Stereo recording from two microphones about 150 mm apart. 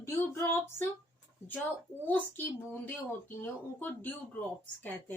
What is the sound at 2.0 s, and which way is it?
Speech, 10° left (ahead or behind).